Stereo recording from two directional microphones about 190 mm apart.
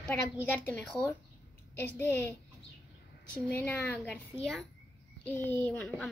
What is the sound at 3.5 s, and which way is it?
Speech, 10° left (ahead or behind).